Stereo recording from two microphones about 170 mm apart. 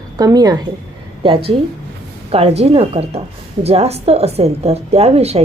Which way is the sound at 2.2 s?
35° right (ahead or behind).